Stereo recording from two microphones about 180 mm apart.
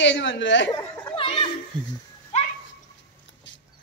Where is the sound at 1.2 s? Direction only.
30° left (ahead or behind).